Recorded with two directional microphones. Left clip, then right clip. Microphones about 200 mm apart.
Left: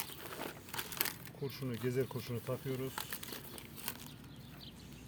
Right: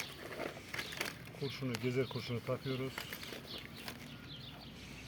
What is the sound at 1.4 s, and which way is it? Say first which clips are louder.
Speech: right 1 dB; 25° left (ahead or behind).